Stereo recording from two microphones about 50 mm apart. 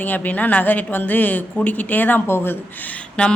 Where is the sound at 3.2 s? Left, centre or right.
Left.